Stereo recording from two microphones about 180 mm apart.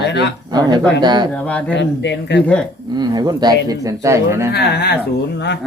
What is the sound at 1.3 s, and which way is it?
Speech, 5° left (ahead or behind).